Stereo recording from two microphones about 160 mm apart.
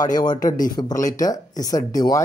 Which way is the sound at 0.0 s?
25° left (ahead or behind).